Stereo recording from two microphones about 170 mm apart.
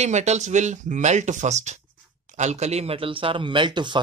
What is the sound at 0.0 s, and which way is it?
A man's voice, 40° right (ahead or behind).